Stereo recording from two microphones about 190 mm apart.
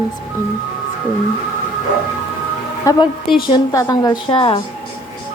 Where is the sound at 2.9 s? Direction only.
20° left (ahead or behind).